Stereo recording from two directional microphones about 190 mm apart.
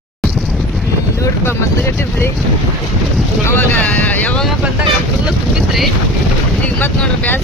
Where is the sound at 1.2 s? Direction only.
15° left (ahead or behind).